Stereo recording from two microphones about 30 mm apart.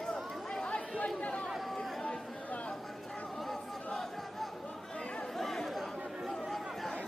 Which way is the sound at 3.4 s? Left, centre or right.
Centre.